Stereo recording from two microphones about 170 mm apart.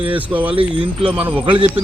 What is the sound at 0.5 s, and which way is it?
Speech, 30° right (ahead or behind).